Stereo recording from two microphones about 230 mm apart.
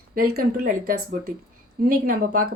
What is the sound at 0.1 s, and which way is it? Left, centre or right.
A woman's voice, right.